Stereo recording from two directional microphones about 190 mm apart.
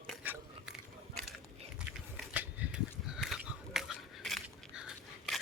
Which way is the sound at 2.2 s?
5° right (ahead or behind).